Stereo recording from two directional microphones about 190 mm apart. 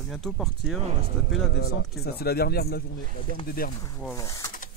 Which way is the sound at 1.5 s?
60° left (ahead or behind).